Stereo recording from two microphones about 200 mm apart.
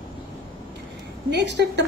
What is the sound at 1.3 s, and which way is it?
Speech, 60° right (ahead or behind).